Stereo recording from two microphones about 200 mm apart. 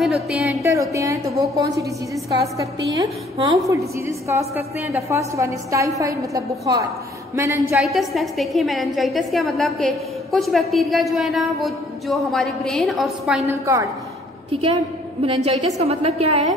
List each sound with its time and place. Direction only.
0.0 s a woman's voice: centre (ahead or behind)
0.6 s a woman's voice: 15° right (ahead or behind)
7.7 s a woman's voice: centre (ahead or behind)
13.5 s a woman's voice: 15° right (ahead or behind)
15.2 s a woman's voice: 30° right (ahead or behind)